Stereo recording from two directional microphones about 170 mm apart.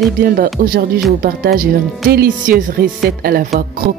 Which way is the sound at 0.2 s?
60° right (ahead or behind).